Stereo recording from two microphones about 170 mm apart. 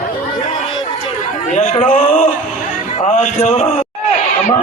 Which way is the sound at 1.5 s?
45° left (ahead or behind).